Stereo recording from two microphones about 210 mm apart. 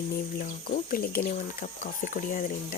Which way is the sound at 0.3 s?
40° left (ahead or behind).